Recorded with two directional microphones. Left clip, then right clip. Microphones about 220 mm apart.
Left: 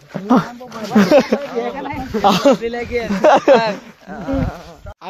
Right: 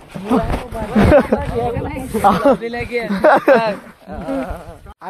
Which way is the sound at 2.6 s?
45° right (ahead or behind).